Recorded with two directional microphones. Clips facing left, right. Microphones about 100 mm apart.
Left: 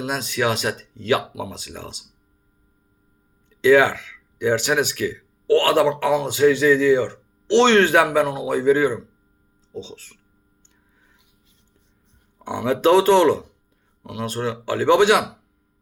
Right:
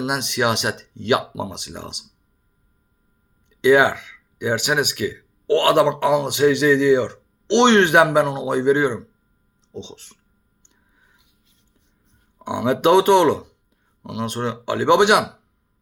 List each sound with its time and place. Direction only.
0.0 s speech: 25° right (ahead or behind)
3.5 s speech: 20° right (ahead or behind)
12.4 s speech: 20° right (ahead or behind)